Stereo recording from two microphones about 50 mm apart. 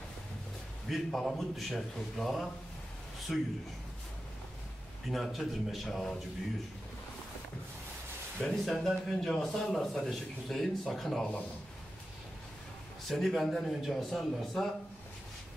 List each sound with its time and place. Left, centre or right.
0.8 s a man's voice: centre
5.0 s a man's voice: centre
8.4 s a man's voice: centre
13.1 s a man's voice: centre